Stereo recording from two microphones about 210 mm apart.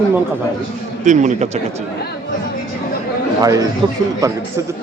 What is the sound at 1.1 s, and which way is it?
Speech, 35° right (ahead or behind).